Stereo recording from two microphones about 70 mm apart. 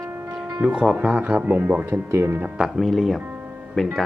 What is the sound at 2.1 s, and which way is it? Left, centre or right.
Speech, right.